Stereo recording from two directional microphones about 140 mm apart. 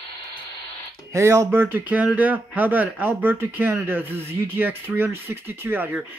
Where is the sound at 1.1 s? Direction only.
20° right (ahead or behind).